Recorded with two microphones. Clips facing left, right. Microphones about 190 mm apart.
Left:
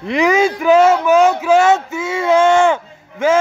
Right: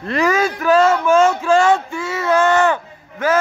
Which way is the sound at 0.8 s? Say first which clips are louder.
Left 2 dB; 10° left (ahead or behind).